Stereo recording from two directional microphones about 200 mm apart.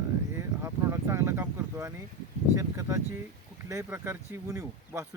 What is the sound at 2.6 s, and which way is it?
Speech, 15° right (ahead or behind).